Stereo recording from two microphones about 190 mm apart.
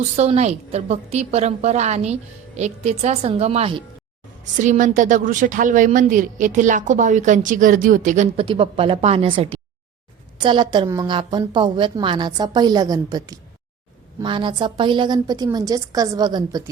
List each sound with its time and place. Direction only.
0.0 s a woman's voice: 35° right (ahead or behind)
4.5 s a woman's voice: 40° right (ahead or behind); by 16.6 s 20° right (ahead or behind)